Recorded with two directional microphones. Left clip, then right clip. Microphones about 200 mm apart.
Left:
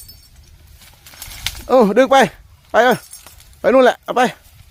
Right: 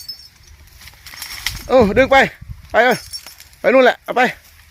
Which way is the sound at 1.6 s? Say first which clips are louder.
Even; 15° left (ahead or behind).